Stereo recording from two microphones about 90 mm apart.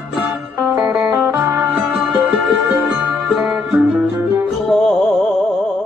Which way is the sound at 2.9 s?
10° right (ahead or behind).